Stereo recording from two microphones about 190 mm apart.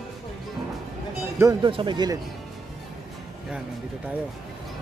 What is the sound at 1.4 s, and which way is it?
Speech, 20° right (ahead or behind).